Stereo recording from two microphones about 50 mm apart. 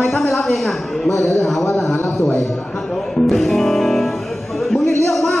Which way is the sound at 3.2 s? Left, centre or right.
Centre.